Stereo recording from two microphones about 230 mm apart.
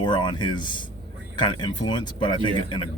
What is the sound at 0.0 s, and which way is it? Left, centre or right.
Speech, centre.